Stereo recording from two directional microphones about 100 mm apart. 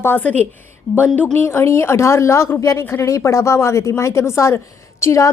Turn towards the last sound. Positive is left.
turn(degrees=30)  # may be behind; listen again after turning